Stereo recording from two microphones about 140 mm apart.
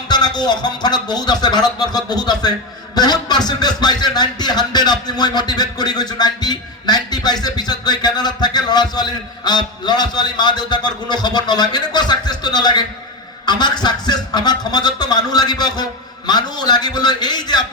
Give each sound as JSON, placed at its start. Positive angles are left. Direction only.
{"t": 0.1, "sound": "a man's voice", "side_deg": 30}